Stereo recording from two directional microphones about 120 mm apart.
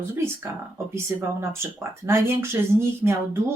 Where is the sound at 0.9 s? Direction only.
20° right (ahead or behind).